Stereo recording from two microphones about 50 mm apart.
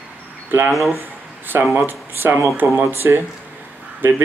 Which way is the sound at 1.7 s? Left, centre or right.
Right.